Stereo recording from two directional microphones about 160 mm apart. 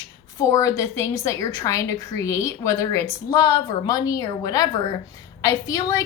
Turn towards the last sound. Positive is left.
turn(degrees=20)  # may be behind; listen again after turning